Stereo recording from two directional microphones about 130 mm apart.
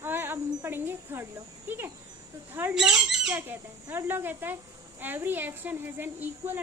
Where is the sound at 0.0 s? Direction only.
15° right (ahead or behind).